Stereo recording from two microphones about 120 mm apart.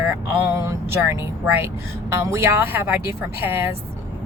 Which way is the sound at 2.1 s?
20° right (ahead or behind).